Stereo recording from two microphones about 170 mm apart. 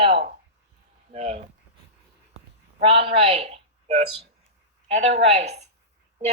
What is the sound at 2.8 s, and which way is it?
A woman's voice, 35° right (ahead or behind).